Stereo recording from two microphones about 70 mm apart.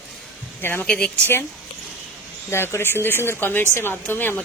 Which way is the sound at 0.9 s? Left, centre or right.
Centre.